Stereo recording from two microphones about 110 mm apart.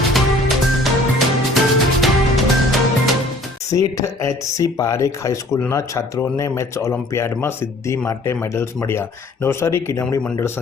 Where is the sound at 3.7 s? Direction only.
30° left (ahead or behind).